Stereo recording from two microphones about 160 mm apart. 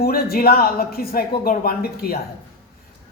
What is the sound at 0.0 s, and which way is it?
Speech, 70° left (ahead or behind).